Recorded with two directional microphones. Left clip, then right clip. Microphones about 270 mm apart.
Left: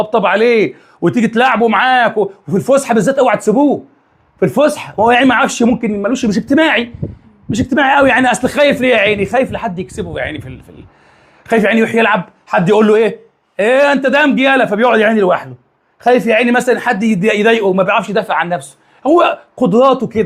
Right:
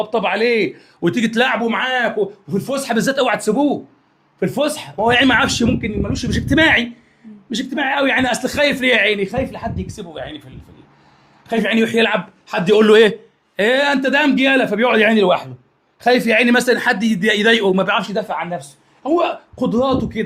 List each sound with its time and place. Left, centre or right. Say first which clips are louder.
0.0 s a man's voice: left 6 dB; centre
1.6 s speech: left 8 dB; left
2.8 s a man's voice: left 6 dB; centre
4.4 s speech: left 7 dB; left
5.2 s a man's voice: left 3 dB; centre
5.8 s speech: left 7 dB; left
6.6 s a man's voice: left 1 dB; centre
7.7 s speech: left 8 dB; left; by 9.3 s centre
9.3 s speech: left 8 dB; left
12.8 s a man's voice: even; centre
13.6 s a man's voice: left 5 dB; centre
18.1 s speech: left 7 dB; left